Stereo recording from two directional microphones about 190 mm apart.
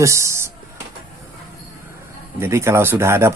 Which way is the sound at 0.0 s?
15° right (ahead or behind).